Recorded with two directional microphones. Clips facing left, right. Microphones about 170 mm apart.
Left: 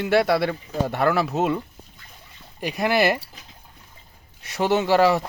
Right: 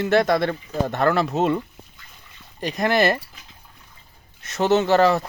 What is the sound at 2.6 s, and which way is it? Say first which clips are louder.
Speech: right 1 dB; 10° left (ahead or behind).